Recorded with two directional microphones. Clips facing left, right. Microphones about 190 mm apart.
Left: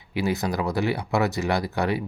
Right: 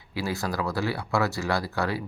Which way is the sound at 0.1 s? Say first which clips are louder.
Left 4 dB; 20° left (ahead or behind).